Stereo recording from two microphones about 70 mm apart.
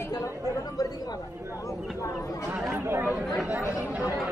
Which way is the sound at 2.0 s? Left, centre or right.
Left.